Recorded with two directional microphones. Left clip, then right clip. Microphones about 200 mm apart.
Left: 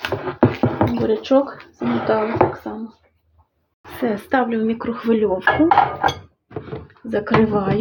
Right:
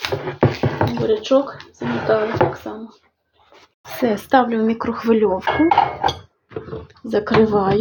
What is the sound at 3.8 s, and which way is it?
Speech, 15° right (ahead or behind).